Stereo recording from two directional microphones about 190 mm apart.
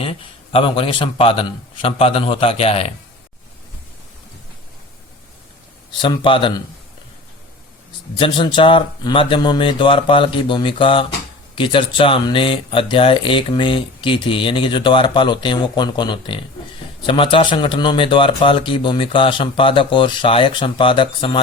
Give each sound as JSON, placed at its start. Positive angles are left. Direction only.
{"t": 0.0, "sound": "speech", "side_deg": 30}
{"t": 6.0, "sound": "speech", "side_deg": 25}
{"t": 8.1, "sound": "speech", "side_deg": 25}